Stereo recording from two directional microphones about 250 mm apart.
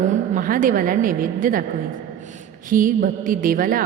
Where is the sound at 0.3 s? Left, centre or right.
Right.